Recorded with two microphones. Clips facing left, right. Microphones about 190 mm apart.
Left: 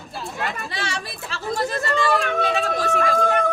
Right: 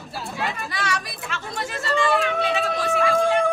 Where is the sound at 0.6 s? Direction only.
30° left (ahead or behind).